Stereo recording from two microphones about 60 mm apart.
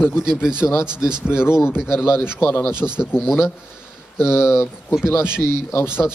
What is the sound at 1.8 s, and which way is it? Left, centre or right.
Speech, left.